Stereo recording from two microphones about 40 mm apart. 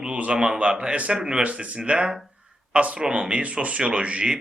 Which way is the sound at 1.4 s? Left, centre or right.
Right.